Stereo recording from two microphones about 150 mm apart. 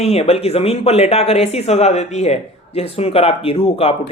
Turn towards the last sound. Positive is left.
turn(degrees=40)  # may be behind; listen again after turning